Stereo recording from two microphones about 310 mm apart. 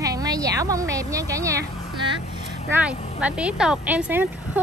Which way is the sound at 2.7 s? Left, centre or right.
Centre.